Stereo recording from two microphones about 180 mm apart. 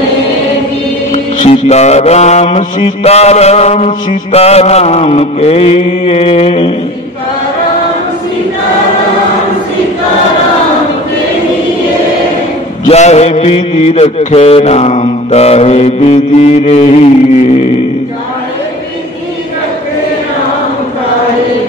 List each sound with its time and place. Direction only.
1.1 s mantra: 35° left (ahead or behind)
12.8 s mantra: 35° left (ahead or behind)